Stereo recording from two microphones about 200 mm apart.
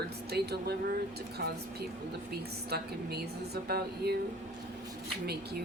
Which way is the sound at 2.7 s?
50° right (ahead or behind).